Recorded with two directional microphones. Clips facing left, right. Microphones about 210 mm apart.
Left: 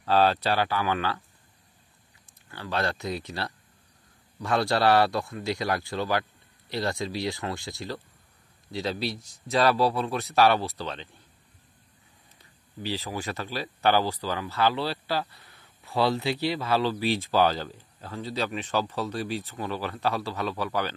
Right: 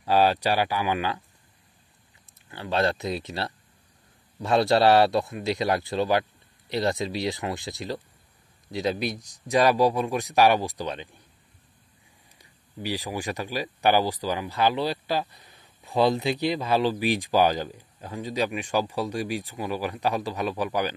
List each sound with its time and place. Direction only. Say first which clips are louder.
0.0 s speech: right 1 dB; 10° right (ahead or behind)
2.5 s a man's voice: right 4 dB; 20° right (ahead or behind)
12.4 s speech: right 2 dB; 15° right (ahead or behind)